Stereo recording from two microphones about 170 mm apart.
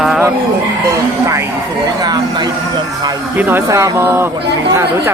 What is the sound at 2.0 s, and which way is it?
Speech, 25° right (ahead or behind).